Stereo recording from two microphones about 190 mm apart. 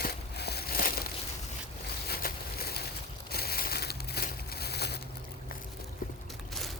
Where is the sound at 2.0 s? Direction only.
55° left (ahead or behind).